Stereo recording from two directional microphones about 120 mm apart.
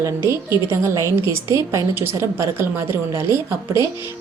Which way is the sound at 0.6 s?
25° right (ahead or behind).